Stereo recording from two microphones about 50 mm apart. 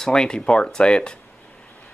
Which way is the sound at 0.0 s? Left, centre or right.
Centre.